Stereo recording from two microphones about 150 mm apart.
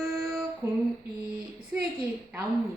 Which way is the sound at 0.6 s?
15° right (ahead or behind).